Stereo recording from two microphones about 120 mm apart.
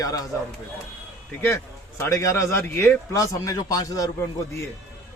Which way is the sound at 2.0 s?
25° left (ahead or behind).